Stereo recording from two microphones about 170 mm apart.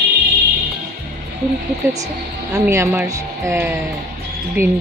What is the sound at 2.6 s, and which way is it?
Speech, 15° right (ahead or behind).